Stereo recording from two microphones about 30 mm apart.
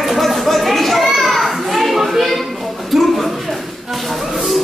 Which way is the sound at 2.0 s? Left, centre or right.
Centre.